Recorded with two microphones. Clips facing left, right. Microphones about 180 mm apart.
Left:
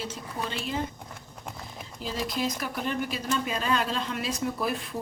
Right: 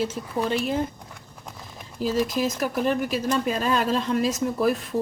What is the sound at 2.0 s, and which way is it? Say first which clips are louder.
A woman's voice: right 7 dB; 45° right (ahead or behind).